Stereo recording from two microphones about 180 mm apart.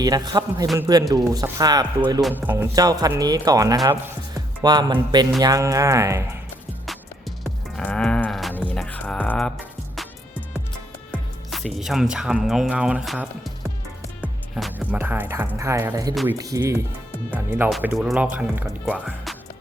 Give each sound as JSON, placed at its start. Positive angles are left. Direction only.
{"t": 0.0, "sound": "speech", "side_deg": -20}
{"t": 7.8, "sound": "sheep", "side_deg": 5}
{"t": 8.5, "sound": "music", "side_deg": 5}
{"t": 11.1, "sound": "speech", "side_deg": 0}